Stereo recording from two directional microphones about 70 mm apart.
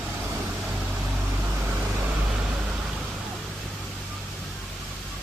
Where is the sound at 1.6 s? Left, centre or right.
Right.